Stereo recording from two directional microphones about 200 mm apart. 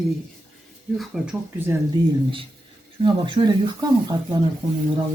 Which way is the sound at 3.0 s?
25° right (ahead or behind).